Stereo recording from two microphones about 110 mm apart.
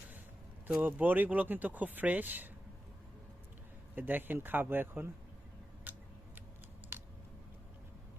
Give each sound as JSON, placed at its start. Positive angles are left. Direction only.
{"t": 0.7, "sound": "speech", "side_deg": -15}
{"t": 3.9, "sound": "speech", "side_deg": -15}
{"t": 5.9, "sound": "scissors", "side_deg": -15}
{"t": 6.9, "sound": "a sound", "side_deg": -20}